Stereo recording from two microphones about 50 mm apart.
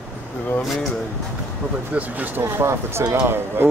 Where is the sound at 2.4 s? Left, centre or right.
Right.